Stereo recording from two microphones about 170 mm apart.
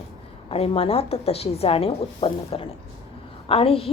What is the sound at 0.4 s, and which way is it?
A woman's voice, 35° left (ahead or behind).